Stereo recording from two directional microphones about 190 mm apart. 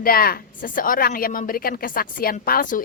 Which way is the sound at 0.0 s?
50° left (ahead or behind).